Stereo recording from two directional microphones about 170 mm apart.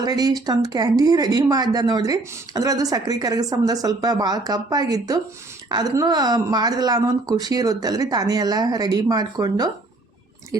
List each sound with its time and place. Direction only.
0.0 s speech: 20° right (ahead or behind)